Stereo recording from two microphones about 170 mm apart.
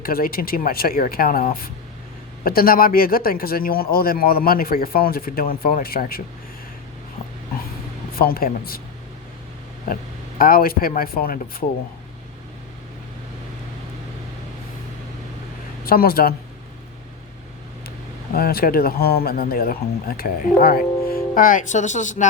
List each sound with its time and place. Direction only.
0.0 s a man's voice: 60° left (ahead or behind)
8.1 s a man's voice: 60° left (ahead or behind)
9.9 s a man's voice: 55° left (ahead or behind)
15.8 s speech: 60° left (ahead or behind)
18.3 s a man's voice: 60° left (ahead or behind); by 22.3 s 45° left (ahead or behind)